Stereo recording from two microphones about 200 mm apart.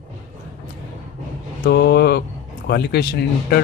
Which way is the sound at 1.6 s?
55° left (ahead or behind).